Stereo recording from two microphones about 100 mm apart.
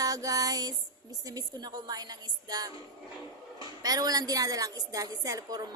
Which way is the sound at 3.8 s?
40° right (ahead or behind).